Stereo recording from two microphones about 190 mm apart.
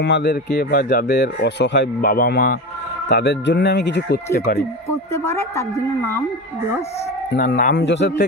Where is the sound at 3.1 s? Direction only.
65° left (ahead or behind).